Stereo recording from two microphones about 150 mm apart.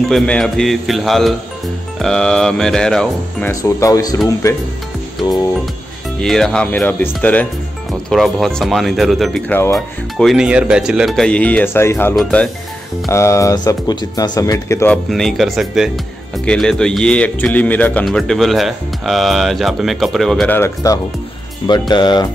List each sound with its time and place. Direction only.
0.1 s speech: 5° left (ahead or behind)
3.6 s speech: 20° left (ahead or behind)
6.2 s speech: 5° left (ahead or behind)
9.5 s speech: 15° left (ahead or behind)
9.8 s speech: centre (ahead or behind)
13.1 s speech: 20° left (ahead or behind)
14.9 s speech: 5° left (ahead or behind)
20.5 s speech: 20° left (ahead or behind)
21.6 s speech: 30° left (ahead or behind)